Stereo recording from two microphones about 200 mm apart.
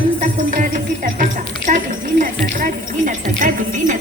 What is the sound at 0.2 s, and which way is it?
Music, 40° right (ahead or behind).